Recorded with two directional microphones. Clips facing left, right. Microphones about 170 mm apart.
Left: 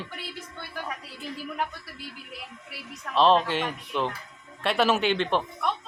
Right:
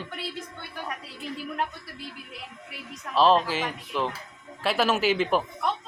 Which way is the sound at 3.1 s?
Centre (ahead or behind).